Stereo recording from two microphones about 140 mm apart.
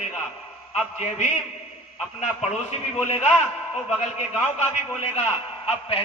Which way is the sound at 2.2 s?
50° left (ahead or behind).